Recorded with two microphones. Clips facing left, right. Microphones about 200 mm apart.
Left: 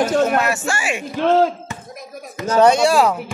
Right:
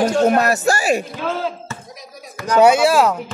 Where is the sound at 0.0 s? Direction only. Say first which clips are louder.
Right 2 dB; 40° right (ahead or behind).